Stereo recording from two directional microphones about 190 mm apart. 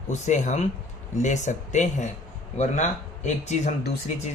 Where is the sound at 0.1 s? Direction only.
40° left (ahead or behind).